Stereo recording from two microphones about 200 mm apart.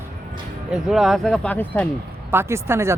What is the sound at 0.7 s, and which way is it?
Speech, centre (ahead or behind).